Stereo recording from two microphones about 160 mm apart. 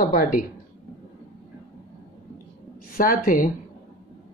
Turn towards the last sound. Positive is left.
turn(degrees=60)  # may be behind; listen again after turning